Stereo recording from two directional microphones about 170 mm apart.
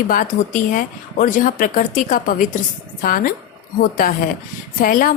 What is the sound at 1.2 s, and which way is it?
A woman's voice, 55° left (ahead or behind).